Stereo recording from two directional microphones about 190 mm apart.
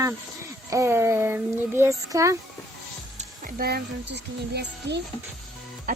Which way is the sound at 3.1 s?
45° right (ahead or behind).